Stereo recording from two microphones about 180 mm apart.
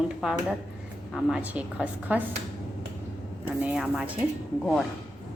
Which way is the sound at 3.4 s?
10° right (ahead or behind).